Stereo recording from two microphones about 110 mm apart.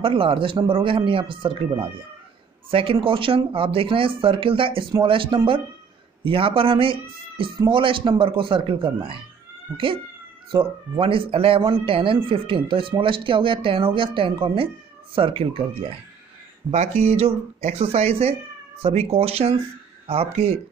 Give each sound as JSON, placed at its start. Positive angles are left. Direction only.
{"t": 0.0, "sound": "speech", "side_deg": -55}
{"t": 2.7, "sound": "speech", "side_deg": -55}
{"t": 10.5, "sound": "speech", "side_deg": -55}
{"t": 16.7, "sound": "speech", "side_deg": -75}